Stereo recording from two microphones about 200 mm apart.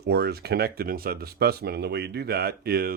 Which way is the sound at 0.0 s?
55° right (ahead or behind).